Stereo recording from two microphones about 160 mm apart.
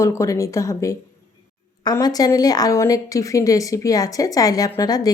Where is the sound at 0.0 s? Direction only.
20° left (ahead or behind).